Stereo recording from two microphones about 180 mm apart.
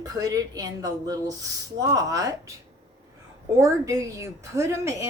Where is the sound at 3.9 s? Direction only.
20° right (ahead or behind).